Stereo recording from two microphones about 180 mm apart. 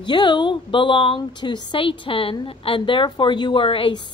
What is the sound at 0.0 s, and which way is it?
Speech, 25° left (ahead or behind).